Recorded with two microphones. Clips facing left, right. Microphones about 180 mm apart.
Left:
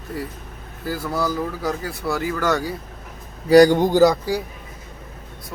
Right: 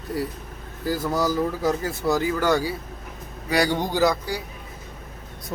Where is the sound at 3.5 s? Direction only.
45° left (ahead or behind).